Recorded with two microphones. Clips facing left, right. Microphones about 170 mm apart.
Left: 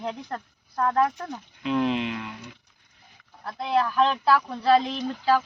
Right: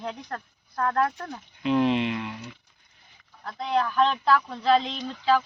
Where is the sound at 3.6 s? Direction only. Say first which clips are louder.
Left 1 dB; 5° left (ahead or behind).